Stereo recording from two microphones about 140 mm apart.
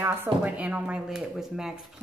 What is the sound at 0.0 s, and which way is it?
Speech, 15° right (ahead or behind).